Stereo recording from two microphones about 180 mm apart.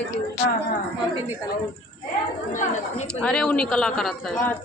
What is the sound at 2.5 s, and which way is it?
Speech, 45° left (ahead or behind).